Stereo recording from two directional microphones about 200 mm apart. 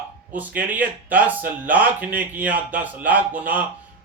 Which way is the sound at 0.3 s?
10° right (ahead or behind).